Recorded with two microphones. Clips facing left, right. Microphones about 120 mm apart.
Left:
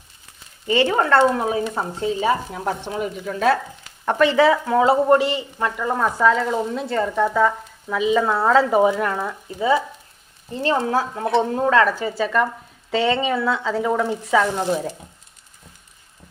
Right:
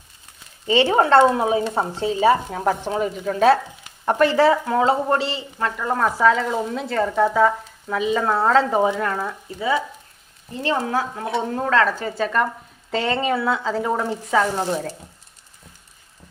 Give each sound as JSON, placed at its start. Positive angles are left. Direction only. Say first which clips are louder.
{"t": 0.7, "sound": "speech", "louder": "right 2 dB", "side_deg": -25}
{"t": 2.5, "sound": "speech", "louder": "right 4 dB", "side_deg": -45}
{"t": 4.0, "sound": "speech", "louder": "even", "side_deg": -5}
{"t": 4.9, "sound": "speech", "louder": "left 4 dB", "side_deg": 15}